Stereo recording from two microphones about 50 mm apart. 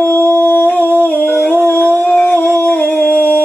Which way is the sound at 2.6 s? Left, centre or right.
Left.